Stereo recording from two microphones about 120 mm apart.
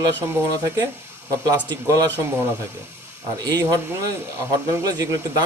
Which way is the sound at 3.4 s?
30° right (ahead or behind).